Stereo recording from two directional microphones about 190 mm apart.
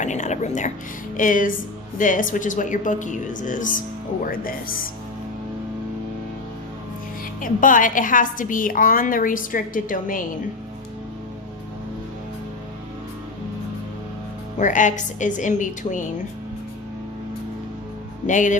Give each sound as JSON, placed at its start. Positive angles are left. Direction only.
{"t": 0.0, "sound": "music", "side_deg": 40}
{"t": 1.1, "sound": "a woman's voice", "side_deg": 45}
{"t": 7.4, "sound": "a woman's voice", "side_deg": 45}
{"t": 14.6, "sound": "a woman's voice", "side_deg": 40}
{"t": 18.3, "sound": "a woman's voice", "side_deg": 40}